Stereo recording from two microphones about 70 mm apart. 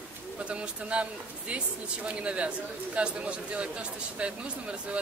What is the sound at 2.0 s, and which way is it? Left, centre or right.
Speech, centre.